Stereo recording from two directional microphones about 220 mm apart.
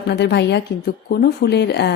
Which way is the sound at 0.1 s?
50° left (ahead or behind).